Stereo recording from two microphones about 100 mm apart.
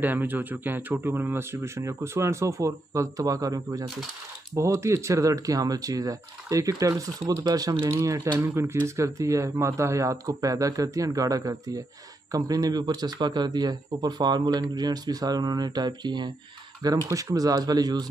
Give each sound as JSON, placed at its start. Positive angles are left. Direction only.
{"t": 0.0, "sound": "speech", "side_deg": -20}
{"t": 4.6, "sound": "a man's voice", "side_deg": -25}
{"t": 16.8, "sound": "speech", "side_deg": -35}